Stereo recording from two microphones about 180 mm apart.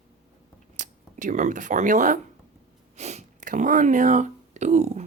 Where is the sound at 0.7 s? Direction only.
45° right (ahead or behind).